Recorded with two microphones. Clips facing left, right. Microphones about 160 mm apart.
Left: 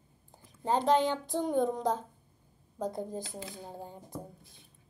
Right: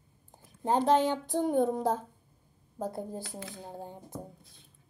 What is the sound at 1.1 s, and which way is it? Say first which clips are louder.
Speech: right 2 dB; 15° right (ahead or behind).